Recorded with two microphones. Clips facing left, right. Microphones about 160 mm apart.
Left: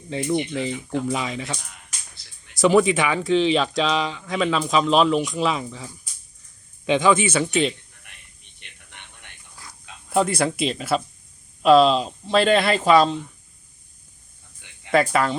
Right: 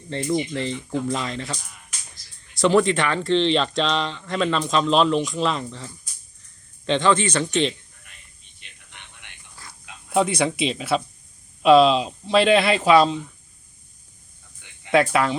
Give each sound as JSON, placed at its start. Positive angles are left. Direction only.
{"t": 0.1, "sound": "speech", "side_deg": 5}
{"t": 2.6, "sound": "speech", "side_deg": 5}
{"t": 8.1, "sound": "a sound", "side_deg": 65}
{"t": 10.1, "sound": "speech", "side_deg": 0}
{"t": 14.8, "sound": "speech", "side_deg": 0}